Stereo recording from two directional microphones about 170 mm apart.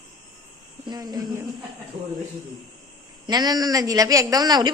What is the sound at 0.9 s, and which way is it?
Speech, 25° right (ahead or behind).